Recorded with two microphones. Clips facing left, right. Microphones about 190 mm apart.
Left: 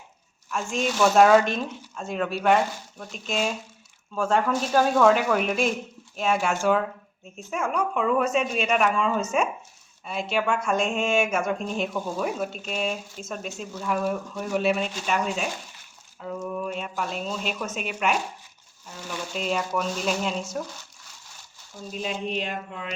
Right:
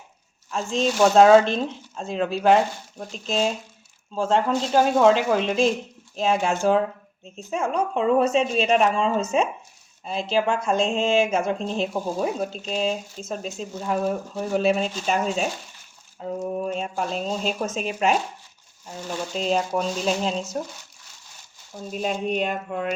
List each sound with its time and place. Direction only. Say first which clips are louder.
0.5 s speech: right 3 dB; 30° right (ahead or behind)
21.9 s speech: right 5 dB; 45° right (ahead or behind)